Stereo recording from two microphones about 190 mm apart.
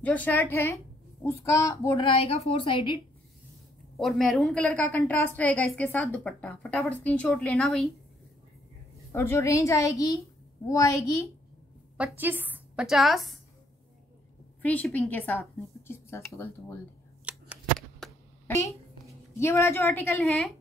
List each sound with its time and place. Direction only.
0.0 s a woman's voice: 10° left (ahead or behind); by 3.0 s 25° left (ahead or behind)
4.0 s a woman's voice: centre (ahead or behind)
9.1 s a woman's voice: 10° left (ahead or behind)
12.0 s a woman's voice: 10° right (ahead or behind)
14.6 s a woman's voice: 10° left (ahead or behind)
17.2 s a sound: 5° right (ahead or behind)
19.3 s a woman's voice: 15° left (ahead or behind)